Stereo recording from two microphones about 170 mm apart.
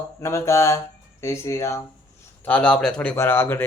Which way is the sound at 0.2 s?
15° left (ahead or behind).